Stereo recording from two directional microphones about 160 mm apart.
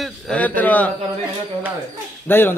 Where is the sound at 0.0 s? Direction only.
5° left (ahead or behind).